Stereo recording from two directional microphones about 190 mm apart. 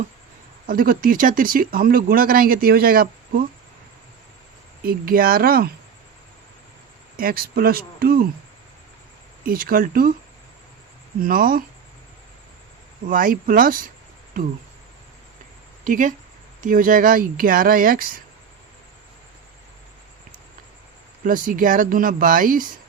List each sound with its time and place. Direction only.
0.7 s speech: 50° right (ahead or behind)
4.8 s speech: 50° right (ahead or behind)
7.2 s speech: 50° right (ahead or behind)
9.5 s speech: 50° right (ahead or behind)
11.2 s speech: 50° right (ahead or behind)
13.1 s speech: 45° right (ahead or behind)
15.8 s speech: 45° right (ahead or behind)
21.2 s speech: 45° right (ahead or behind)